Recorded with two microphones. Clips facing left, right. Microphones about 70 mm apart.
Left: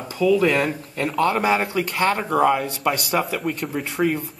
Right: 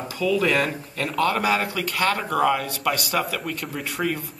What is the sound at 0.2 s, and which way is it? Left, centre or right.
A man's voice, centre.